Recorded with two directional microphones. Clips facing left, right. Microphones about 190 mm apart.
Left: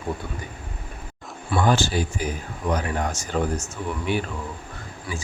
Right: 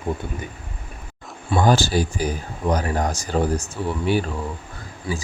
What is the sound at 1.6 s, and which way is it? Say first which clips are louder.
Speech: right 3 dB; 35° right (ahead or behind).